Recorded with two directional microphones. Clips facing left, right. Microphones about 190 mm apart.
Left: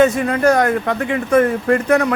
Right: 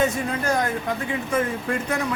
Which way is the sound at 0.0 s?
75° left (ahead or behind).